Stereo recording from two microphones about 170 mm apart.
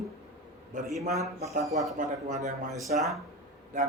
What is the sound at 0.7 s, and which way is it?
Speech, 50° right (ahead or behind).